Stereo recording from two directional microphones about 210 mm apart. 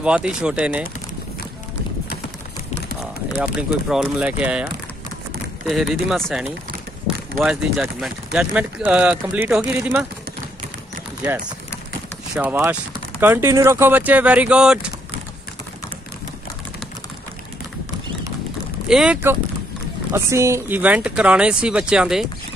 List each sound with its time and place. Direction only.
0.0 s speech: 5° right (ahead or behind)
3.0 s speech: 5° right (ahead or behind)
5.7 s speech: centre (ahead or behind)
12.4 s speech: 10° right (ahead or behind)
18.9 s speech: 5° right (ahead or behind)